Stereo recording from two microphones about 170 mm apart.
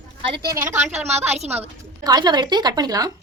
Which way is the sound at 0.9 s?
40° right (ahead or behind).